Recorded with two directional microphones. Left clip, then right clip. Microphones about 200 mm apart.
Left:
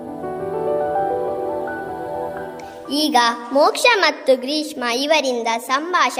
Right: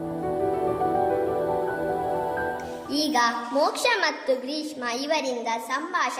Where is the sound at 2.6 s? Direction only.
40° left (ahead or behind).